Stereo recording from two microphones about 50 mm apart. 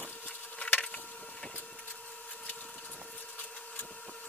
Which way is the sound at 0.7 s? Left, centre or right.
Left.